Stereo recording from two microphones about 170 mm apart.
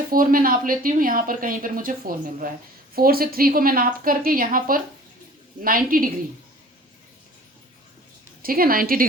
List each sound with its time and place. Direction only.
0.1 s a woman's voice: 55° right (ahead or behind)
8.4 s a woman's voice: 60° right (ahead or behind)